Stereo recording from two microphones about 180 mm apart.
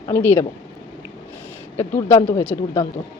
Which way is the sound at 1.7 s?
15° left (ahead or behind).